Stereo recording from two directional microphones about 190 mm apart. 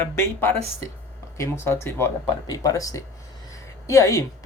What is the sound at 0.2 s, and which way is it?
Speech, 15° left (ahead or behind).